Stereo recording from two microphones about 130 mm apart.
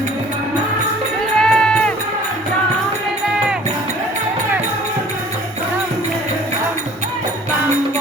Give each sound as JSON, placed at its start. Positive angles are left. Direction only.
{"t": 1.4, "sound": "music", "side_deg": 5}